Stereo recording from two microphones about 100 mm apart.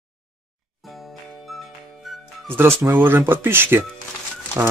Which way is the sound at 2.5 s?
25° right (ahead or behind).